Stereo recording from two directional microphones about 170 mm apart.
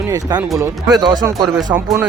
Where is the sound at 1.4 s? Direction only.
Centre (ahead or behind).